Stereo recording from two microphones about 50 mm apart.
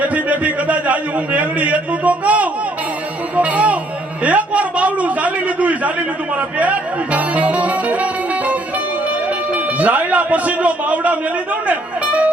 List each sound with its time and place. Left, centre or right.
0.0 s a man's voice: right
9.8 s speech: right